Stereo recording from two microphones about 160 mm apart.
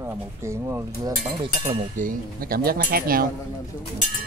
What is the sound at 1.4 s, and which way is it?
Speech, 30° right (ahead or behind).